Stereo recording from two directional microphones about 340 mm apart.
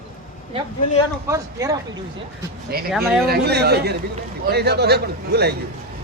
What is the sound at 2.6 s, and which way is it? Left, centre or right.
A man's voice, right.